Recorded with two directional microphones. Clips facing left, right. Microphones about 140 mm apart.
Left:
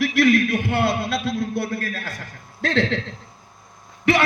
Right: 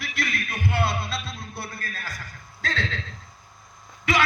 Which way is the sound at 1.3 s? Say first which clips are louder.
Left 12 dB; 75° left (ahead or behind).